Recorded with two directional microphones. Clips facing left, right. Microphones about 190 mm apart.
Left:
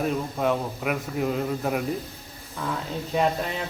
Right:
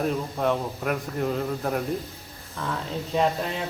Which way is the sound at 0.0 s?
Centre (ahead or behind).